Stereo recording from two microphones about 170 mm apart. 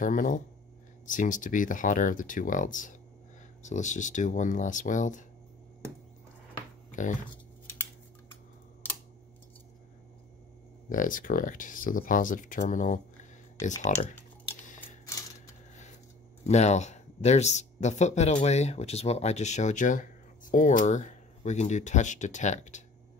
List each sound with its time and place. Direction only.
0.0 s speech: 50° left (ahead or behind)
6.9 s a sound: 45° left (ahead or behind)
10.9 s speech: 50° left (ahead or behind)
16.4 s speech: 40° left (ahead or behind)